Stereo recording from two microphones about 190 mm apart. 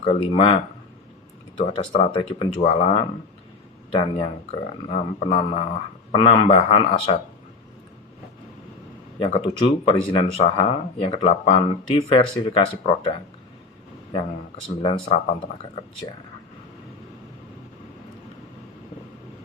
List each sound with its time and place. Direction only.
0.0 s speech: 30° left (ahead or behind)
9.2 s speech: 30° left (ahead or behind)
14.8 s speech: 30° left (ahead or behind)